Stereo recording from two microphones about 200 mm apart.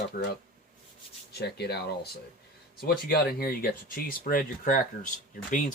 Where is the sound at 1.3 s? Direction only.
55° left (ahead or behind).